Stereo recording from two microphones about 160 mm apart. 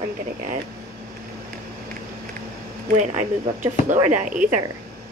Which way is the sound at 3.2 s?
50° right (ahead or behind).